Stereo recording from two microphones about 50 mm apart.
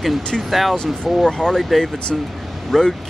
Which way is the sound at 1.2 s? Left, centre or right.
Centre.